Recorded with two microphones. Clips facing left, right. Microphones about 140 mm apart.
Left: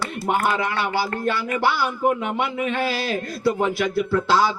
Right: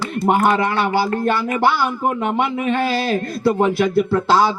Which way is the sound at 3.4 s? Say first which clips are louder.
Right 4 dB; 50° right (ahead or behind).